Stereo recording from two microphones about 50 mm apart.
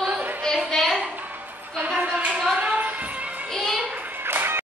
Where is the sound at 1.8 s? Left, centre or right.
Right.